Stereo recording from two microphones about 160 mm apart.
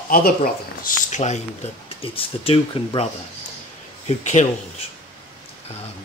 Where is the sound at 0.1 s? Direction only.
65° left (ahead or behind); by 1.4 s 45° left (ahead or behind).